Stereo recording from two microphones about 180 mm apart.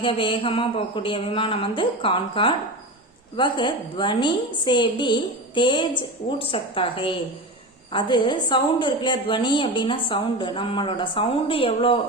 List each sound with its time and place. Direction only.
0.0 s a woman's voice: 30° left (ahead or behind)